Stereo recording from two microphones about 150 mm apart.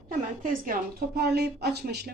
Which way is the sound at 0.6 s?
75° right (ahead or behind).